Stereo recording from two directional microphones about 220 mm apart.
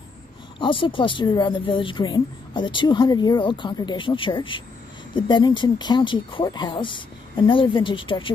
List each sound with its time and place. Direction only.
0.6 s speech: 20° left (ahead or behind)